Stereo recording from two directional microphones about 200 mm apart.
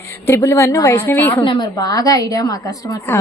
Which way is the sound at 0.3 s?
15° left (ahead or behind).